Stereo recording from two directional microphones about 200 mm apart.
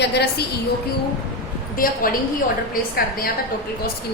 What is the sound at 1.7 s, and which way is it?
Speech, 45° left (ahead or behind).